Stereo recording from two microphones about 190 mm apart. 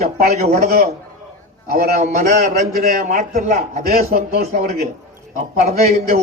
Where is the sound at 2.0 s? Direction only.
40° right (ahead or behind).